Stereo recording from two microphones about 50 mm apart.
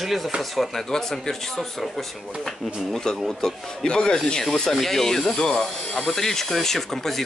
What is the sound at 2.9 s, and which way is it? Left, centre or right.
Speech, centre.